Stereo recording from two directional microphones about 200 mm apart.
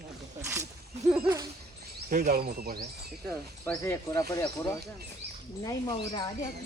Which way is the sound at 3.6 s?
10° left (ahead or behind).